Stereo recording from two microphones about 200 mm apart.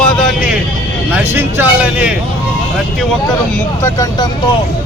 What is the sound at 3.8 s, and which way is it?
Speech, 15° left (ahead or behind).